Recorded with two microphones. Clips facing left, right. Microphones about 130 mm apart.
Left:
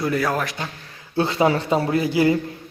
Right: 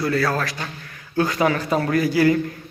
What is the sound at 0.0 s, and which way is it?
A man's voice, 15° left (ahead or behind).